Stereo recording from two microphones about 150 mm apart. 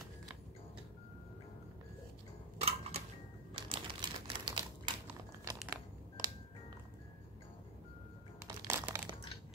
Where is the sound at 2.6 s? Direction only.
40° right (ahead or behind).